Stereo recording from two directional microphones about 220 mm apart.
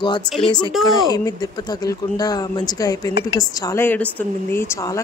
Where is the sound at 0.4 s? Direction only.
20° left (ahead or behind).